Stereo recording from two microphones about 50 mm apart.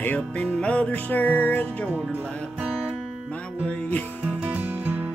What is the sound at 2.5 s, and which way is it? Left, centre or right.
Music, right.